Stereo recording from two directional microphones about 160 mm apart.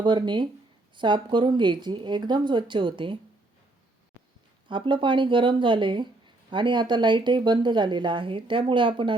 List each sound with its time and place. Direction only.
0.0 s speech: 30° right (ahead or behind)
4.7 s speech: 30° right (ahead or behind)